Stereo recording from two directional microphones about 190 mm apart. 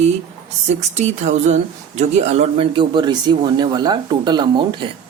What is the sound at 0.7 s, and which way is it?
Speech, 35° right (ahead or behind).